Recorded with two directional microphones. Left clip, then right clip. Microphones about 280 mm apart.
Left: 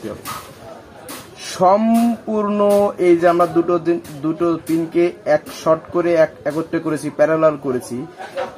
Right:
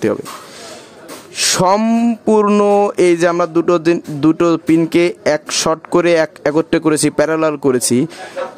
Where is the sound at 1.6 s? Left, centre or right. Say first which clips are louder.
Left 2 dB; right.